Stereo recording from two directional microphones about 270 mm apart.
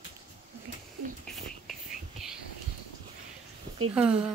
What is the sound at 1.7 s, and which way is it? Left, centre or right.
Whispering, centre.